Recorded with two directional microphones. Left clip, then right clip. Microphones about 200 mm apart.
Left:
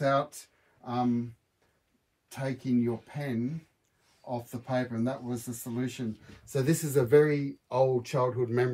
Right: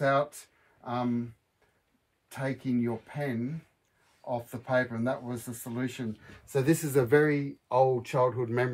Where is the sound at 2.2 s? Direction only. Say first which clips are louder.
Right 1 dB; 15° right (ahead or behind).